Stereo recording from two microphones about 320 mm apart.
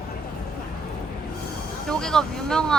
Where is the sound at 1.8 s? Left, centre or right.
Centre.